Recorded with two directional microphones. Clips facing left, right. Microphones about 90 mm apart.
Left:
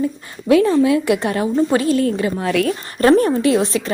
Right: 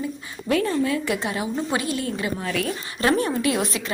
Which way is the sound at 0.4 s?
90° left.